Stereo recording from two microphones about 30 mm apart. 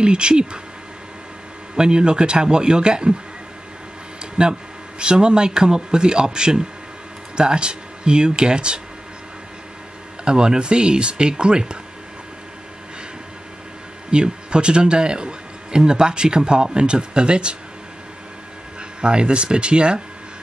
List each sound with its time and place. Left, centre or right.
0.0 s speech: right
1.8 s a man's voice: right
4.4 s a man's voice: right
10.2 s speech: right
14.1 s speech: right
18.9 s speech: right